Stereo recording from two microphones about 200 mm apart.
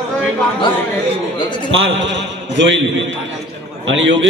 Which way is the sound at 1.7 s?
70° right (ahead or behind).